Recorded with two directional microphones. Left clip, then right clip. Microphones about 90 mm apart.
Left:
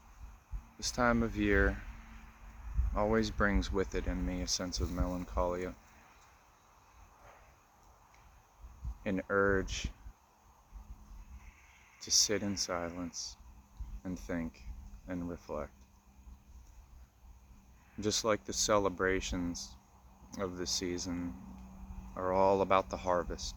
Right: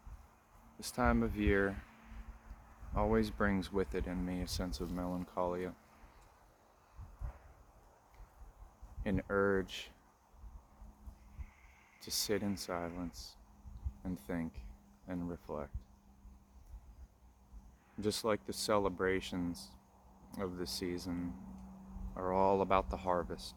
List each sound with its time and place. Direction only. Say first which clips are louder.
0.8 s speech: left 3 dB; 35° right (ahead or behind)
2.9 s speech: left 2 dB; 35° right (ahead or behind)
9.0 s speech: left 3 dB; 45° right (ahead or behind)
11.9 s speech: left 6 dB; 45° right (ahead or behind)
18.0 s speech: left 3 dB; 35° right (ahead or behind)